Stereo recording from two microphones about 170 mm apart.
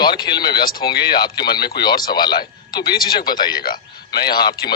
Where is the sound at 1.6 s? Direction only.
70° left (ahead or behind).